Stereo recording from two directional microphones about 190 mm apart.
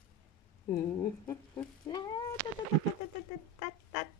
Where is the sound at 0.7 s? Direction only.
15° left (ahead or behind).